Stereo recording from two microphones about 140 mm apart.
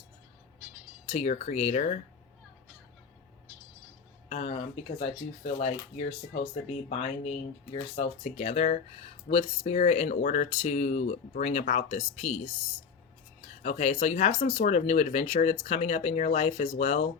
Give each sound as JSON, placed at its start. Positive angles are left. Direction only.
{"t": 1.0, "sound": "speech", "side_deg": 50}
{"t": 4.3, "sound": "speech", "side_deg": 50}
{"t": 7.0, "sound": "speech", "side_deg": 50}
{"t": 9.7, "sound": "speech", "side_deg": 55}
{"t": 10.2, "sound": "speech", "side_deg": 70}
{"t": 13.6, "sound": "speech", "side_deg": 55}
{"t": 14.6, "sound": "speech", "side_deg": 60}